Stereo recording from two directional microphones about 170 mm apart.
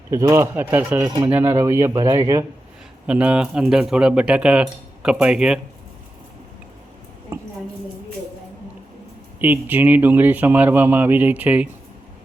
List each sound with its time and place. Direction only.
0.1 s speech: 15° right (ahead or behind)
1.0 s speech: 25° right (ahead or behind)
3.1 s speech: 5° right (ahead or behind)
7.3 s a sound: 15° right (ahead or behind)
9.4 s speech: 10° right (ahead or behind)